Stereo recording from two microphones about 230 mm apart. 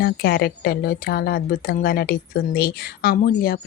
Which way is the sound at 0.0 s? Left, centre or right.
Left.